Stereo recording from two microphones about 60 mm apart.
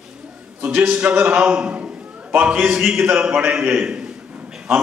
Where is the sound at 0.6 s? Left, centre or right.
Centre.